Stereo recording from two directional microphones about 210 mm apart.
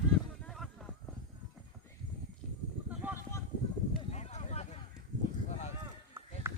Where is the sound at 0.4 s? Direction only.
Centre (ahead or behind).